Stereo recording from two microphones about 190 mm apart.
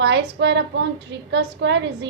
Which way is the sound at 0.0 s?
65° right (ahead or behind).